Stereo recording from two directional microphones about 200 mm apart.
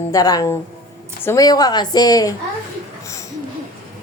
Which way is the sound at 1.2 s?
15° left (ahead or behind).